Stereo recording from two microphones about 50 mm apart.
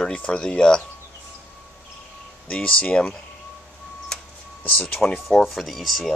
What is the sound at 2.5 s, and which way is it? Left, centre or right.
Speech, left.